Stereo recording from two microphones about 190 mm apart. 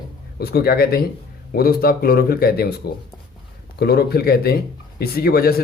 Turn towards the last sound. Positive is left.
turn(degrees=55)  # may be behind; listen again after turning